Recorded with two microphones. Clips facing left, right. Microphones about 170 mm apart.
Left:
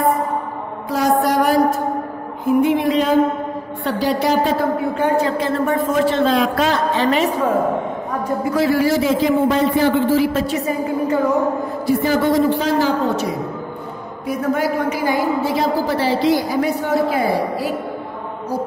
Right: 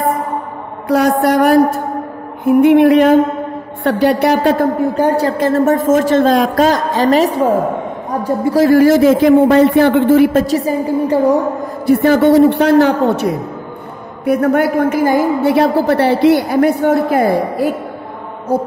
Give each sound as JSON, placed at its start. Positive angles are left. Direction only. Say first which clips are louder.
{"t": 0.8, "sound": "a woman's voice", "louder": "right 5 dB", "side_deg": -65}
{"t": 4.9, "sound": "a woman's voice", "louder": "right 4 dB", "side_deg": -40}
{"t": 10.4, "sound": "a woman's voice", "louder": "right 5 dB", "side_deg": -35}
{"t": 11.8, "sound": "a woman's voice", "louder": "right 7 dB", "side_deg": -60}
{"t": 15.4, "sound": "a woman's voice", "louder": "right 7 dB", "side_deg": -65}